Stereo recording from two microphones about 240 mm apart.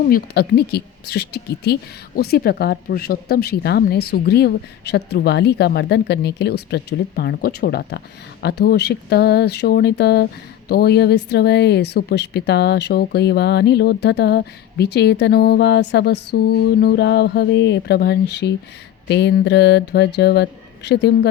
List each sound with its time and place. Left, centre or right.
0.1 s speech: left